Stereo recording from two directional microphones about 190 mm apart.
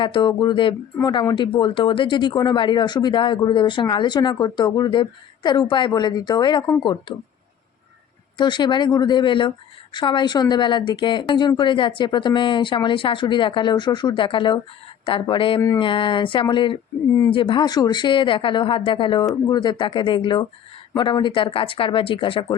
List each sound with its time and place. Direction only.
0.0 s speech: 25° left (ahead or behind)
8.4 s speech: 25° left (ahead or behind)